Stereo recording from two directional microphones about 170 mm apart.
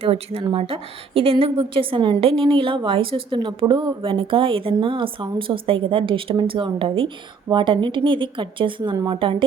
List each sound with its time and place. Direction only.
0.0 s a woman's voice: 35° right (ahead or behind)